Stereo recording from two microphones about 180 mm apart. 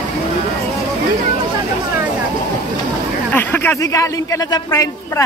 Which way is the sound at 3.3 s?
10° left (ahead or behind).